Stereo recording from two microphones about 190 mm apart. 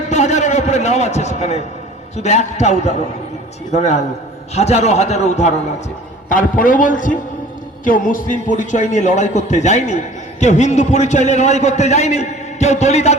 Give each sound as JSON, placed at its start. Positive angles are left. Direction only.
{"t": 0.1, "sound": "a man's voice", "side_deg": 35}